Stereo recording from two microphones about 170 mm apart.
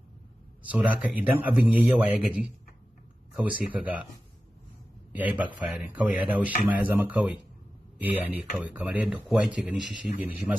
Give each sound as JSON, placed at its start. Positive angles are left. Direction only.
{"t": 0.7, "sound": "speech", "side_deg": -10}
{"t": 5.1, "sound": "speech", "side_deg": -10}